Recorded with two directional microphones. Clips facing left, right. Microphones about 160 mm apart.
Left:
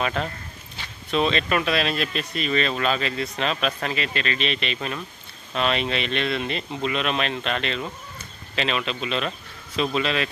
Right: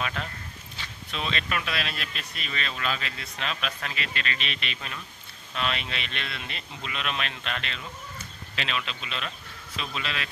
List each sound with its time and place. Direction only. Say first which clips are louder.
0.0 s speech: left 7 dB; 35° left (ahead or behind)
4.7 s speech: left 9 dB; 50° left (ahead or behind)
5.5 s speech: left 8 dB; 30° left (ahead or behind)